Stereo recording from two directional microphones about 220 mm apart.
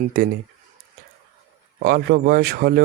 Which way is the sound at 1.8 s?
45° right (ahead or behind).